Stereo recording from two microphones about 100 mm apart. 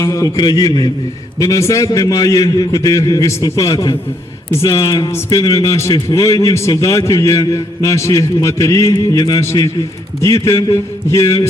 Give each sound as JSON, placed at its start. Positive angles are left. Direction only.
{"t": 0.0, "sound": "a man's voice", "side_deg": 30}
{"t": 0.3, "sound": "a man's voice", "side_deg": 50}
{"t": 1.4, "sound": "a man's voice", "side_deg": 30}